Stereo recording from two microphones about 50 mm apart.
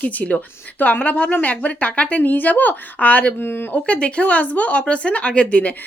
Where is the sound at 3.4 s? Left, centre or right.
Left.